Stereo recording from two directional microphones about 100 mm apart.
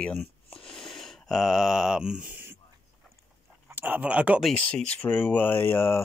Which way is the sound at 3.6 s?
20° right (ahead or behind).